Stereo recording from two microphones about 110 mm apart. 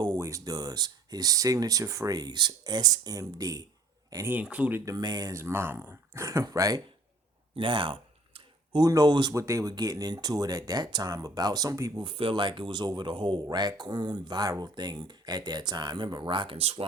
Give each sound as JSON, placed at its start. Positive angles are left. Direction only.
{"t": 0.0, "sound": "speech", "side_deg": -30}
{"t": 4.3, "sound": "speech", "side_deg": -15}
{"t": 4.9, "sound": "speech", "side_deg": -35}
{"t": 7.5, "sound": "a sound", "side_deg": -50}
{"t": 8.8, "sound": "speech", "side_deg": -35}
{"t": 9.3, "sound": "speech", "side_deg": -30}
{"t": 12.0, "sound": "speech", "side_deg": -50}
{"t": 16.6, "sound": "speech", "side_deg": -65}